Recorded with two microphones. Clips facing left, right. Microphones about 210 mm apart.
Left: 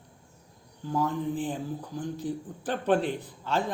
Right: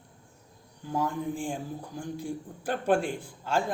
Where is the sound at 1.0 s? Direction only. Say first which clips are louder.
Left 2 dB; 10° right (ahead or behind).